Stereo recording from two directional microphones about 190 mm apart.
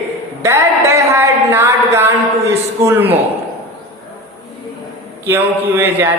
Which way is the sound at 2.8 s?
10° right (ahead or behind).